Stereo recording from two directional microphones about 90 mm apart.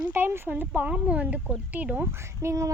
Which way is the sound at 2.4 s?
35° right (ahead or behind).